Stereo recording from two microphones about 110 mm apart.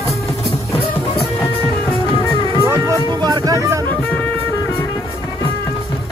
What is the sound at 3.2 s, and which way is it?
Speech, 40° right (ahead or behind).